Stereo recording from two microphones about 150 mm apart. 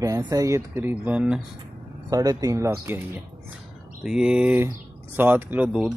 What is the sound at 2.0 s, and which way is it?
Speech, 25° right (ahead or behind).